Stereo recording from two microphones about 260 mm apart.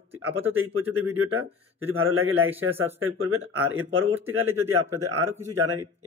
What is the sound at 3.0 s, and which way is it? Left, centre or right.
Speech, right.